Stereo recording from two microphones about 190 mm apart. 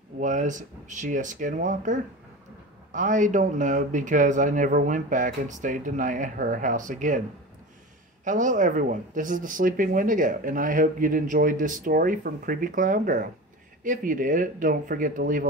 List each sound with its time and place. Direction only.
0.2 s speech: 40° right (ahead or behind)
8.2 s speech: 40° right (ahead or behind)